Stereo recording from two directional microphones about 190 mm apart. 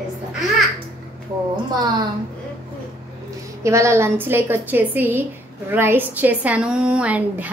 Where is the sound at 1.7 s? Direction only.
20° right (ahead or behind).